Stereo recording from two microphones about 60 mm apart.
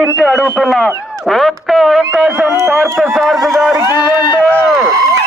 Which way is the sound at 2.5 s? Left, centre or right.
Right.